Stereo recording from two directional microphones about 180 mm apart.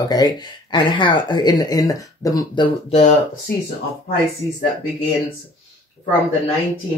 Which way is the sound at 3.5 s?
60° left (ahead or behind).